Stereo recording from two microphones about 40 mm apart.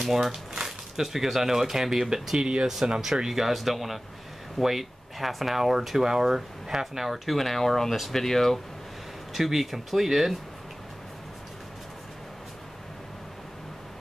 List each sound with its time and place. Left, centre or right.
0.0 s speech: centre
2.4 s speech: right
3.0 s speech: centre
7.3 s speech: centre
9.3 s speech: centre